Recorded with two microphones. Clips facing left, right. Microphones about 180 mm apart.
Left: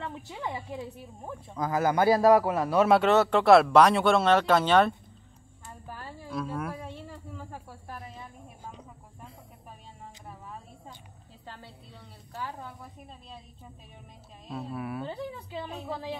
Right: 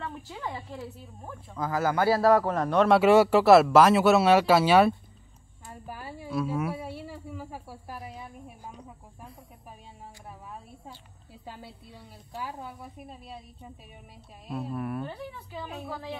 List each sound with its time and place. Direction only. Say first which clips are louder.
0.0 s a man's voice: even; 15° left (ahead or behind)
3.0 s a woman's voice: right 4 dB; 10° right (ahead or behind)
5.7 s a sound: right 2 dB; 10° right (ahead or behind)
11.4 s a woman's voice: right 3 dB; 10° right (ahead or behind)
14.5 s speech: right 3 dB; centre (ahead or behind)
15.9 s speech: left 3 dB; 25° left (ahead or behind)